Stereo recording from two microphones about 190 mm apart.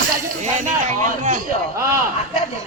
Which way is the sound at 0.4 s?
40° right (ahead or behind).